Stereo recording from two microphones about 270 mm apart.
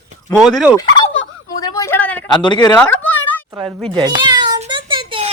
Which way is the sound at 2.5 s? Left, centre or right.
Centre.